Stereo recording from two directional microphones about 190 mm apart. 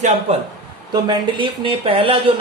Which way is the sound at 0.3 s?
30° right (ahead or behind).